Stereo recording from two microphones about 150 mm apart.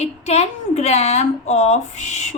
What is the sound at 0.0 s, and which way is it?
A woman's voice, 45° left (ahead or behind).